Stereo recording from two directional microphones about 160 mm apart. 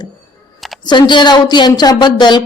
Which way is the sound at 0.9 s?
30° left (ahead or behind).